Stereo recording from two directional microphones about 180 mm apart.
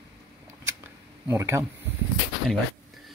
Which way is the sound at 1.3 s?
15° right (ahead or behind).